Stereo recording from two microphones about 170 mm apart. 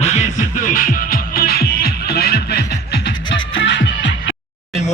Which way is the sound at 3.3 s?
90° left.